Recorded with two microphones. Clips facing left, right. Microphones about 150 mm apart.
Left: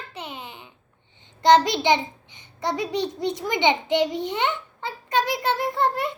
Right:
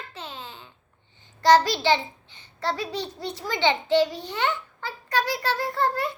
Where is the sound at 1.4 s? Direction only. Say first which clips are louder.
Left 1 dB; 20° left (ahead or behind).